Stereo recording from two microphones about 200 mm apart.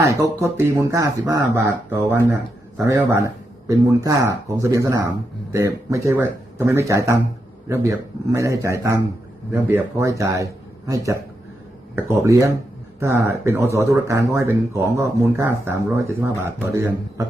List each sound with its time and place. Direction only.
0.0 s speech: 15° right (ahead or behind)